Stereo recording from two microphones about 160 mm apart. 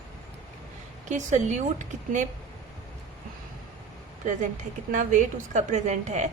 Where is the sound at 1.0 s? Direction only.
50° right (ahead or behind).